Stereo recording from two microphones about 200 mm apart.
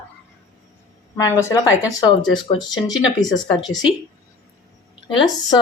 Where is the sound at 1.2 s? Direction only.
15° left (ahead or behind).